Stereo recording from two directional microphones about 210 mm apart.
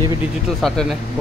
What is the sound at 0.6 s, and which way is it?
Speech, centre (ahead or behind).